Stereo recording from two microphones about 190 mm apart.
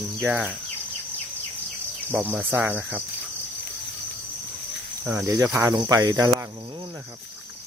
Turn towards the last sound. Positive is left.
turn(degrees=-20)  # may be behind; listen again after turning